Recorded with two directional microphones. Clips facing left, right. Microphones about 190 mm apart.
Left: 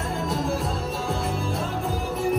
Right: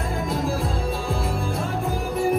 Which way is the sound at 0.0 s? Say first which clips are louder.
Right 1 dB; centre (ahead or behind).